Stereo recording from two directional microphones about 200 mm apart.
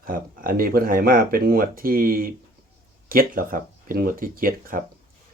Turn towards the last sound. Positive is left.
turn(degrees=-45)  # may be behind; listen again after turning